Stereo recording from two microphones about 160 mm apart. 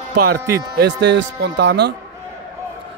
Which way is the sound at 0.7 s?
90° right.